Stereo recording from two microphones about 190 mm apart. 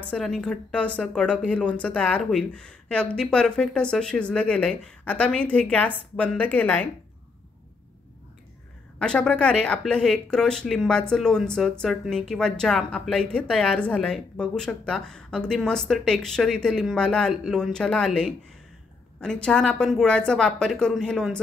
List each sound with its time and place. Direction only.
0.1 s speech: centre (ahead or behind)
9.0 s speech: 5° left (ahead or behind)